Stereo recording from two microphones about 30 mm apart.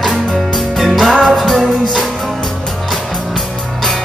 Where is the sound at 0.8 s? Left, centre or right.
Centre.